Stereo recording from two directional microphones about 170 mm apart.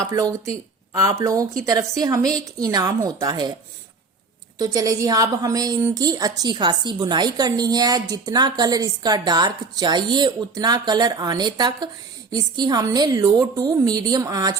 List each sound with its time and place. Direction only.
0.0 s a woman's voice: 20° right (ahead or behind)
4.5 s a woman's voice: 25° right (ahead or behind)